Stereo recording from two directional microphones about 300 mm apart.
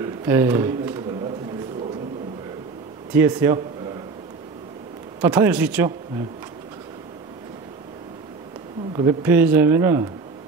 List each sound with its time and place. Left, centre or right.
0.0 s a sound: centre
3.1 s speech: centre
5.2 s speech: centre
8.9 s speech: centre